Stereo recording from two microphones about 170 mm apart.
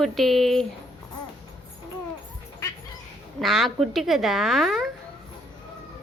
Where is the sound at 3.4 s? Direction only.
Centre (ahead or behind).